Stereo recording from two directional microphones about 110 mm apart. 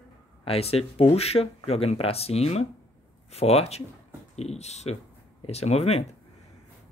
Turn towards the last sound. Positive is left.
turn(degrees=70)  # may be behind; listen again after turning